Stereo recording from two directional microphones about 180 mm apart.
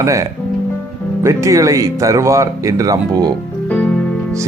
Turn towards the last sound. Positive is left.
turn(degrees=5)  # may be behind; listen again after turning